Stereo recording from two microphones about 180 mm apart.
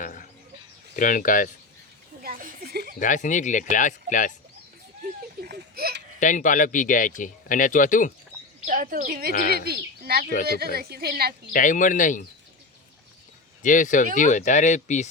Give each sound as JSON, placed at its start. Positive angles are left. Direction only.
{"t": 0.0, "sound": "bird", "side_deg": 50}
{"t": 0.9, "sound": "speech", "side_deg": 45}
{"t": 2.2, "sound": "a sound", "side_deg": -50}
{"t": 3.0, "sound": "speech", "side_deg": 45}
{"t": 5.4, "sound": "a sound", "side_deg": -60}
{"t": 6.1, "sound": "speech", "side_deg": 45}
{"t": 8.6, "sound": "speech", "side_deg": -50}
{"t": 9.3, "sound": "speech", "side_deg": 60}
{"t": 9.6, "sound": "a woman's voice", "side_deg": -60}
{"t": 11.5, "sound": "speech", "side_deg": 45}
{"t": 13.6, "sound": "speech", "side_deg": 45}